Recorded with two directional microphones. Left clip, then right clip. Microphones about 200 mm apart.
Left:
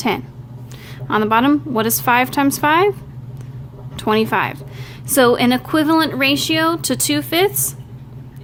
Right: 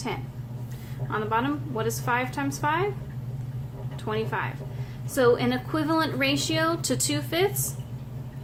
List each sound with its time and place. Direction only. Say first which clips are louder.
1.1 s a woman's voice: left 12 dB; 50° left (ahead or behind)
3.9 s a woman's voice: left 13 dB; 50° left (ahead or behind)